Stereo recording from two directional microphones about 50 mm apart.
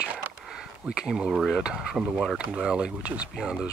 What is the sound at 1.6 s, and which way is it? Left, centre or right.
Speech, right.